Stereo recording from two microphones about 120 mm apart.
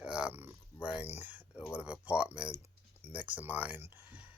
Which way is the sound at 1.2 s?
15° right (ahead or behind).